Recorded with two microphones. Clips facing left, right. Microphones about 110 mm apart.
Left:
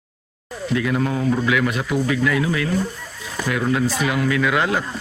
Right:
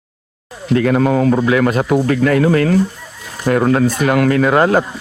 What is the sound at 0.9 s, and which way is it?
Speech, 90° right.